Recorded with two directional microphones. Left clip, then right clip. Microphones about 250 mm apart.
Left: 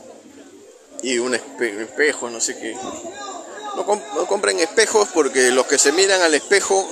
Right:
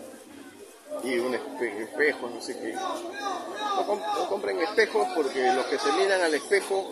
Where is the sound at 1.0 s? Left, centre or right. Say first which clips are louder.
Left 7 dB; left.